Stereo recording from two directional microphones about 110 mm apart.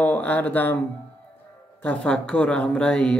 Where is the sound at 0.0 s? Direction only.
15° left (ahead or behind).